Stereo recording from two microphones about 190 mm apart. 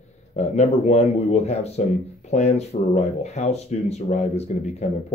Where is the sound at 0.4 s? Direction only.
35° left (ahead or behind).